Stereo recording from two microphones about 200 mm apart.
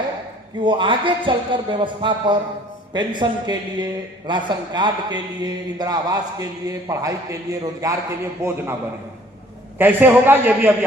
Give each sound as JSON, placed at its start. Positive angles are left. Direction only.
{"t": 0.6, "sound": "a man's voice", "side_deg": -25}
{"t": 9.7, "sound": "a man's voice", "side_deg": -10}